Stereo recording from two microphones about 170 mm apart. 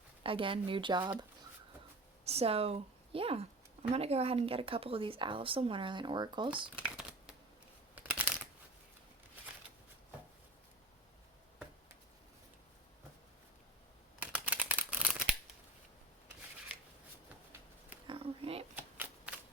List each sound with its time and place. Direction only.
0.2 s speech: 30° right (ahead or behind)
2.2 s speech: 35° right (ahead or behind)
6.7 s crumpling: 5° right (ahead or behind)
14.2 s crumpling: 10° right (ahead or behind)
18.1 s a sound: 35° right (ahead or behind)
18.8 s shuffling cards: 10° right (ahead or behind)